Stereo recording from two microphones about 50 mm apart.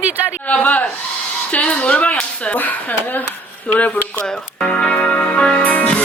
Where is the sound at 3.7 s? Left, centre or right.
Left.